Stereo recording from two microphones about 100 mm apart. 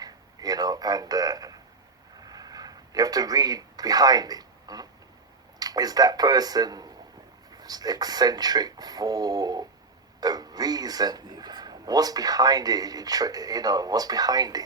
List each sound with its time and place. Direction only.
0.0 s a man's voice: 40° right (ahead or behind)
2.2 s a sound: 40° right (ahead or behind)
5.5 s speech: 40° right (ahead or behind)